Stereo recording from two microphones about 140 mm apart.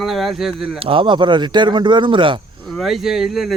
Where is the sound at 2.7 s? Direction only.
Centre (ahead or behind).